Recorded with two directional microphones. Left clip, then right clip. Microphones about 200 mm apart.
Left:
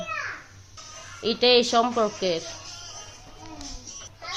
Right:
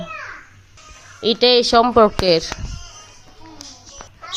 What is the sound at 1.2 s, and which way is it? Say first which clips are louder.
Speech: right 5 dB; 20° right (ahead or behind).